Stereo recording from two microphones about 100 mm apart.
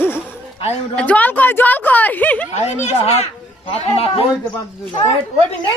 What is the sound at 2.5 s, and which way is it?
Speech, 90° left.